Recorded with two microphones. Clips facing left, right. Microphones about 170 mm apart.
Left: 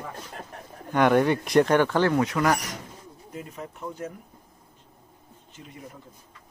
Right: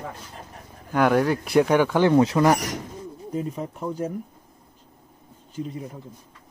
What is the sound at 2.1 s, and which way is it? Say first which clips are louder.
Speech: right 5 dB; 25° right (ahead or behind).